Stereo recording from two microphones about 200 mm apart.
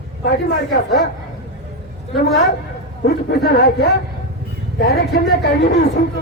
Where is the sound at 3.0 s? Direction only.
55° left (ahead or behind).